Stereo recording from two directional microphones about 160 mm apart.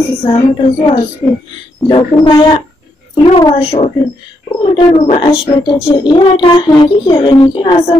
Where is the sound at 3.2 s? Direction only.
30° left (ahead or behind).